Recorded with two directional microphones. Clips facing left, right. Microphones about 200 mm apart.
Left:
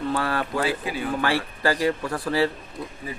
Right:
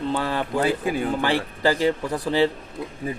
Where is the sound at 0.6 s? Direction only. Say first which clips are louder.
Right 4 dB; 45° right (ahead or behind).